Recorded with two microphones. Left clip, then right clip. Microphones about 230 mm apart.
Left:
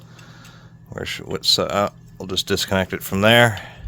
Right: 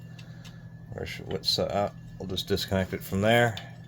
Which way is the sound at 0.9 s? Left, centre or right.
Left.